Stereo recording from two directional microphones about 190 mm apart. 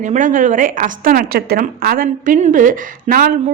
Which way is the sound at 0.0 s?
40° right (ahead or behind).